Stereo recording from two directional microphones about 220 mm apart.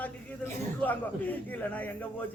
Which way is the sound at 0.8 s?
5° left (ahead or behind).